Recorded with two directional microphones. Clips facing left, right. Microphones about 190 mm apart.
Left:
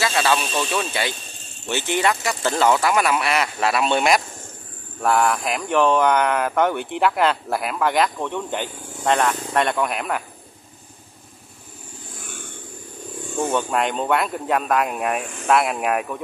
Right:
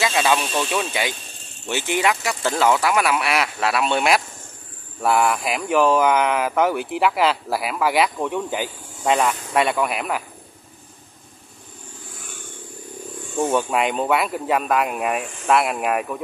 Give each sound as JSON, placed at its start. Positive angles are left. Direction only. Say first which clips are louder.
{"t": 0.0, "sound": "speech", "louder": "right 1 dB", "side_deg": -15}
{"t": 13.4, "sound": "speech", "louder": "right 2 dB", "side_deg": -5}